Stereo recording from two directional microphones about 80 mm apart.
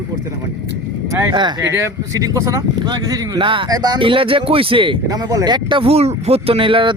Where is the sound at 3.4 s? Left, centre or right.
Right.